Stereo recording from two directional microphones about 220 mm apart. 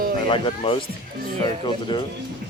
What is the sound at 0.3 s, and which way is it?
Speech, 25° left (ahead or behind).